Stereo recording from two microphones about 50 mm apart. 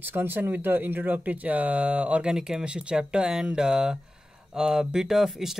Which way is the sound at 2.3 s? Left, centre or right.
Centre.